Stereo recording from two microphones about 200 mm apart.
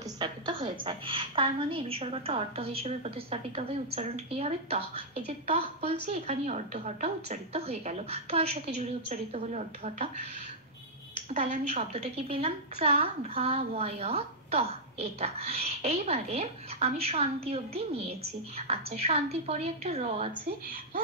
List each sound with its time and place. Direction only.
0.2 s a woman's voice: 25° right (ahead or behind)
11.3 s a woman's voice: 35° right (ahead or behind)